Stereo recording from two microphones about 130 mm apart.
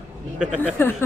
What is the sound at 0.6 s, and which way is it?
Speech, 15° left (ahead or behind).